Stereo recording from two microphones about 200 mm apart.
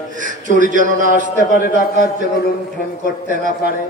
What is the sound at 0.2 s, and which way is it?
A man's voice, 40° right (ahead or behind).